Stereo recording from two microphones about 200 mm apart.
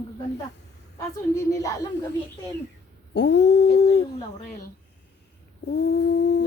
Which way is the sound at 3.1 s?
60° left (ahead or behind).